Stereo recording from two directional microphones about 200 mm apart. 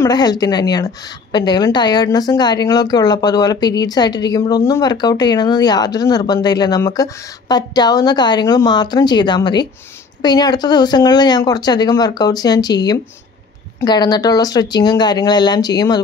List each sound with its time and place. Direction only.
0.0 s speech: 20° left (ahead or behind)